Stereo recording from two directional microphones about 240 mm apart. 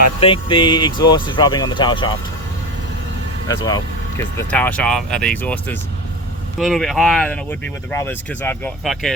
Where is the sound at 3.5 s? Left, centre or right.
Centre.